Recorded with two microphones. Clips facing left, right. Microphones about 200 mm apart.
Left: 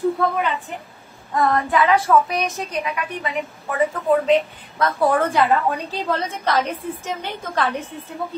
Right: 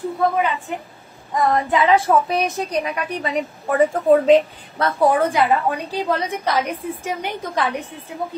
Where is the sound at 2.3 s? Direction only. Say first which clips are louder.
Right 3 dB; 35° right (ahead or behind).